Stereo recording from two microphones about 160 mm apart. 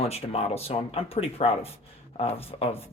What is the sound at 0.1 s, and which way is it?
Speech, 40° left (ahead or behind).